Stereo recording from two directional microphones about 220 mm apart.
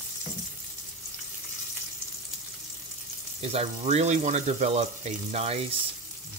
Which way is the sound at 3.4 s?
30° right (ahead or behind).